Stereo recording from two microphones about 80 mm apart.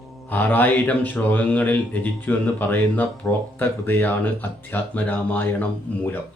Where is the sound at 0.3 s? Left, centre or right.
Left.